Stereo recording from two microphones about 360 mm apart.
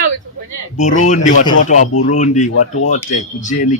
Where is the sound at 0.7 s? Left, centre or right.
Centre.